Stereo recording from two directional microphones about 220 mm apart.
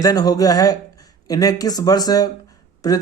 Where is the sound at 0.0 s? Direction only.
15° left (ahead or behind).